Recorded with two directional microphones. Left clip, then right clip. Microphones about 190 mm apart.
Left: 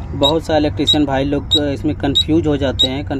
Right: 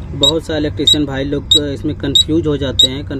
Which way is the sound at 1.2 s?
10° right (ahead or behind).